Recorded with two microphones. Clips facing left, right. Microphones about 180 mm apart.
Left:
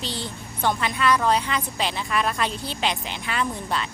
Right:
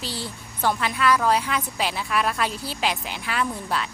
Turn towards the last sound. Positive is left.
turn(degrees=-5)  # may be behind; listen again after turning